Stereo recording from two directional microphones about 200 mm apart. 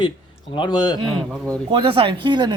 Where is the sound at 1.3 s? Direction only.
Centre (ahead or behind).